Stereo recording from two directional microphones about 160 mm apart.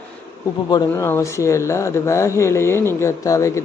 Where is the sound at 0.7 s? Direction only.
25° left (ahead or behind).